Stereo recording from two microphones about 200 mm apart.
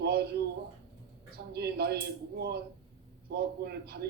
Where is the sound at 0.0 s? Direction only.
55° right (ahead or behind).